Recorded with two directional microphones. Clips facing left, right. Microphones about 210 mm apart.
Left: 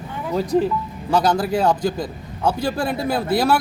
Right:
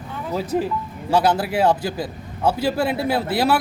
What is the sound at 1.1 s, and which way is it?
Speech, 5° right (ahead or behind).